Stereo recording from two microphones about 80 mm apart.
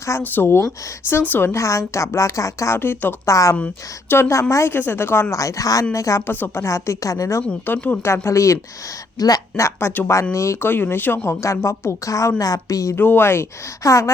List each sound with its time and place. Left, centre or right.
0.2 s speech: left
1.5 s a woman's voice: left
2.7 s speech: left
3.2 s a woman's voice: left
5.4 s a woman's voice: left
6.2 s speech: left
6.7 s a woman's voice: left
7.7 s a woman's voice: left
9.1 s speech: left
9.6 s speech: left
10.3 s a woman's voice: left
13.0 s a woman's voice: left